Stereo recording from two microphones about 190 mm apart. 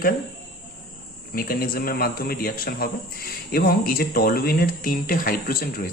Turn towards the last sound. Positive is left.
turn(degrees=50)  # may be behind; listen again after turning